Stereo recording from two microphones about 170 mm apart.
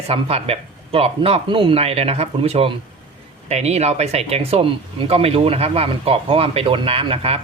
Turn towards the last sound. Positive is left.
turn(degrees=-35)  # may be behind; listen again after turning